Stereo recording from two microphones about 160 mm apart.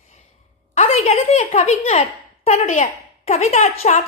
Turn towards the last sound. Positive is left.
turn(degrees=45)  # may be behind; listen again after turning